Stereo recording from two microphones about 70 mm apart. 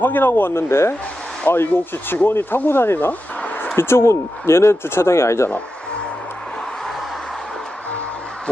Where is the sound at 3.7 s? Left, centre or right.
Left.